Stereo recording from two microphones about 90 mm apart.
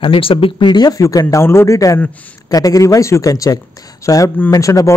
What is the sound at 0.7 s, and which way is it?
Speech, 50° left (ahead or behind).